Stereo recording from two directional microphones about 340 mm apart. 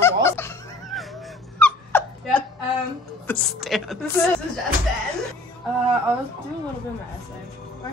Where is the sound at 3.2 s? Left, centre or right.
Centre.